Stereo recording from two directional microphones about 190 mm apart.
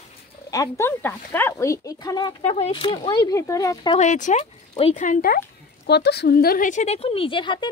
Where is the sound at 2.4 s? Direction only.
30° left (ahead or behind).